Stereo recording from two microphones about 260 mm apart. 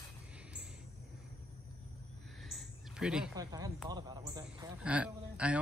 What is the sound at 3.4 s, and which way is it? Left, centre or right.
A man's voice, centre.